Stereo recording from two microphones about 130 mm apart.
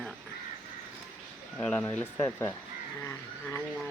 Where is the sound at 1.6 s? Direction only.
10° left (ahead or behind).